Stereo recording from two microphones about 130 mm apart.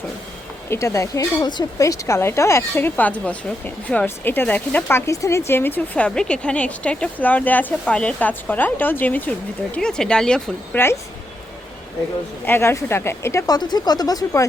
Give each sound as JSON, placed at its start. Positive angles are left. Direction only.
{"t": 0.7, "sound": "speech", "side_deg": 25}
{"t": 12.5, "sound": "speech", "side_deg": 20}
{"t": 13.6, "sound": "speech", "side_deg": 35}